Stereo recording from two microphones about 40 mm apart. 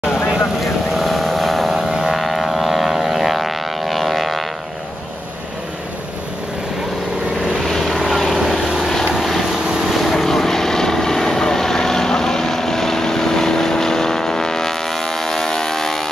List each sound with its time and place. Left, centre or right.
0.0 s vehicle: left
0.9 s vehicle: centre
7.8 s vehicle: centre